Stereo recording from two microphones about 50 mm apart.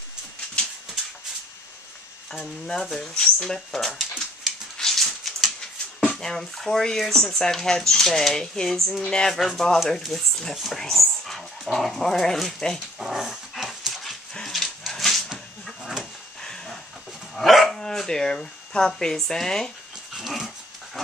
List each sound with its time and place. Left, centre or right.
0.6 s a sound: centre
2.4 s speech: centre
4.7 s a sound: centre
6.1 s speech: centre
9.0 s speech: centre
9.4 s speech: centre
13.0 s dog: centre
14.5 s a sound: centre
15.8 s a sound: centre
17.4 s dog: centre
17.7 s speech: centre
20.2 s dog: centre